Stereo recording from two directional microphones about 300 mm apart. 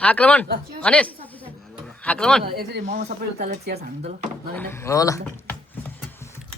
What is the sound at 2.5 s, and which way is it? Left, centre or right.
Speech, right.